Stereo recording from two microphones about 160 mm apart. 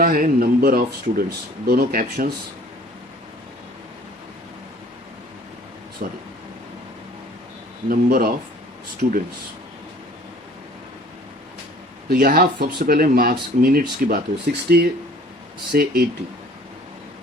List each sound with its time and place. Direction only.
0.0 s speech: 60° right (ahead or behind)
6.0 s speech: 60° right (ahead or behind)
7.9 s speech: 65° right (ahead or behind)
12.0 s speech: 65° right (ahead or behind); by 14.8 s 90° right
15.7 s speech: 70° right (ahead or behind)